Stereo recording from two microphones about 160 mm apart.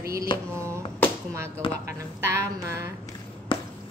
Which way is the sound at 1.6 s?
35° left (ahead or behind).